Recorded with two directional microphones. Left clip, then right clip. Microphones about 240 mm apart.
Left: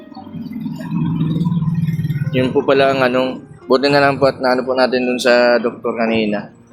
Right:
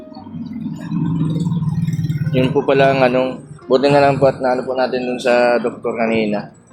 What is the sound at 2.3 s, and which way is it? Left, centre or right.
Speech, centre.